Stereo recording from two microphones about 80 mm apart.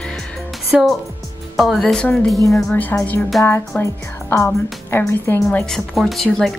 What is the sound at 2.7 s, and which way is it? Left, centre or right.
Speech, left.